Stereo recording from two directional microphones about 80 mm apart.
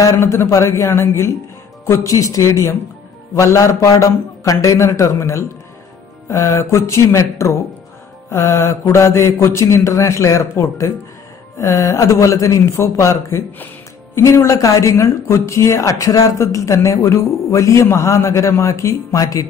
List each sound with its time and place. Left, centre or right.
0.0 s speech: left